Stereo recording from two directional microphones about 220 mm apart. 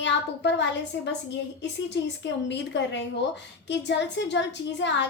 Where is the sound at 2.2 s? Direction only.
50° left (ahead or behind).